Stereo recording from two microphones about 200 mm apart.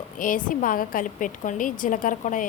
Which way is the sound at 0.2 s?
40° left (ahead or behind).